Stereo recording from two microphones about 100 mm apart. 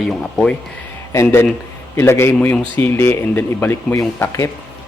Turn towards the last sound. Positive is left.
turn(degrees=30)  # may be behind; listen again after turning